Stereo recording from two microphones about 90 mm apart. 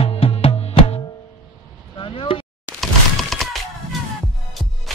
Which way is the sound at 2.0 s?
80° left.